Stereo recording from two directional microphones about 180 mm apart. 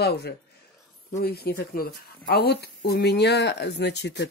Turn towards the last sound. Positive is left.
turn(degrees=75)  # may be behind; listen again after turning